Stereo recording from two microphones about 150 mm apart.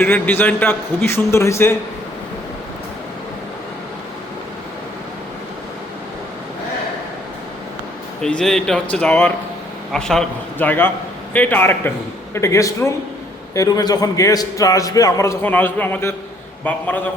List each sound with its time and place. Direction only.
0.0 s a man's voice: 15° left (ahead or behind)
8.2 s a man's voice: 5° left (ahead or behind)